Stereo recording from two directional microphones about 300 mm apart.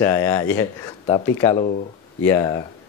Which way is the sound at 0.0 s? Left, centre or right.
Centre.